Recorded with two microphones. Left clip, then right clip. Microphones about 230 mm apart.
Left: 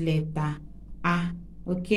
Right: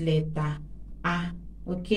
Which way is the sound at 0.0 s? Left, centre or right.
Left.